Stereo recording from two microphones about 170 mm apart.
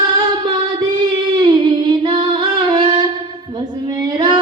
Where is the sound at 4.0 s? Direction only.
25° right (ahead or behind).